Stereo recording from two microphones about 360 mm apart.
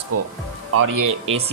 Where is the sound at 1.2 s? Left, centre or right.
Centre.